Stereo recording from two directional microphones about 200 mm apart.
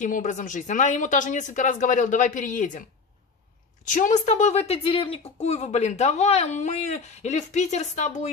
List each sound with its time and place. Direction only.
0.0 s a woman's voice: 40° left (ahead or behind)
3.8 s a woman's voice: 40° left (ahead or behind)